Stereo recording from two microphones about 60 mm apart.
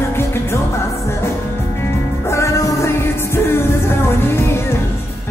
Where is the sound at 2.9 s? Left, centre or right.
Left.